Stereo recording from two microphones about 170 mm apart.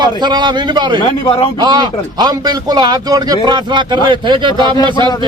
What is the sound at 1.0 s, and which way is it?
Speech, 30° left (ahead or behind).